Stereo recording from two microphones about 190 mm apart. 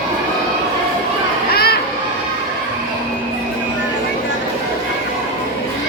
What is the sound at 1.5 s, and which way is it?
Children playing, 55° left (ahead or behind).